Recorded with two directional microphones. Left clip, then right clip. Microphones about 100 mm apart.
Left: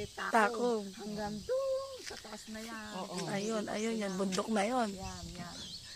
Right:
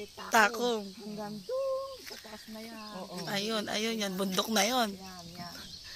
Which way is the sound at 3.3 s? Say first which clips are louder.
Right 5 dB; 30° right (ahead or behind).